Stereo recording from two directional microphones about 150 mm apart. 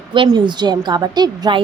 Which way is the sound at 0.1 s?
30° right (ahead or behind).